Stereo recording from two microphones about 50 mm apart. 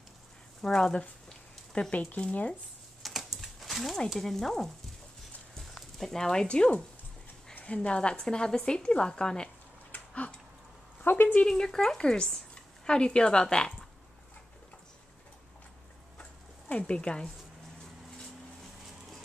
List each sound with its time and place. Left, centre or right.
0.6 s speech: centre
1.7 s speech: left
3.0 s typing: centre
4.2 s speech: centre
5.6 s a sound: centre
6.4 s speech: left
9.9 s a sound: left
11.1 s speech: left
11.4 s speech: centre
16.2 s a sound: left